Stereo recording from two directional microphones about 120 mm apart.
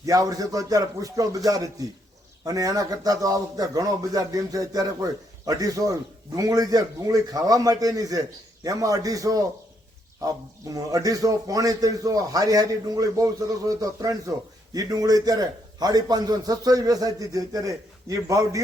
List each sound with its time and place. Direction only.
0.0 s a man's voice: 30° right (ahead or behind)
10.7 s a man's voice: 30° right (ahead or behind)